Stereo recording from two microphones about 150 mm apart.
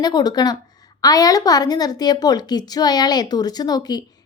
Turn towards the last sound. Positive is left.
turn(degrees=25)  # may be behind; listen again after turning